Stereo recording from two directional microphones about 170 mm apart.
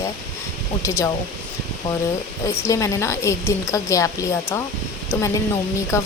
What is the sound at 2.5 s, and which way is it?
Speech, 15° left (ahead or behind).